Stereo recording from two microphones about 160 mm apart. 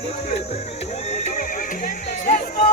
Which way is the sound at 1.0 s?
45° left (ahead or behind).